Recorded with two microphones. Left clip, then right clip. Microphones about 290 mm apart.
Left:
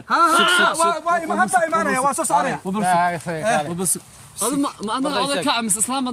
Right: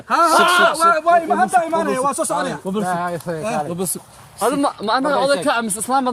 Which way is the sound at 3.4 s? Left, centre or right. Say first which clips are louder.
Left 4 dB; left.